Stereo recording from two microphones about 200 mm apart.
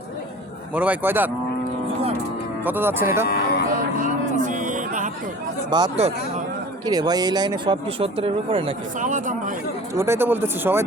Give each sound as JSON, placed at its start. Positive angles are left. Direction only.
{"t": 0.7, "sound": "speech", "side_deg": -5}
{"t": 2.6, "sound": "speech", "side_deg": -10}
{"t": 3.2, "sound": "music", "side_deg": 50}
{"t": 4.0, "sound": "a sound", "side_deg": -40}
{"t": 5.7, "sound": "speech", "side_deg": -20}
{"t": 9.0, "sound": "speech", "side_deg": -40}
{"t": 9.9, "sound": "speech", "side_deg": -15}